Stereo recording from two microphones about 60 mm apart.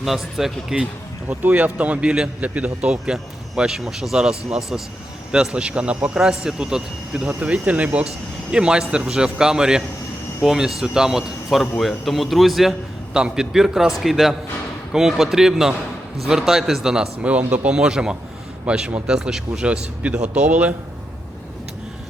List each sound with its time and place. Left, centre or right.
0.0 s a man's voice: centre
1.3 s a man's voice: right; by 12.7 s centre
13.1 s a man's voice: centre
17.2 s speech: right
17.7 s a man's voice: centre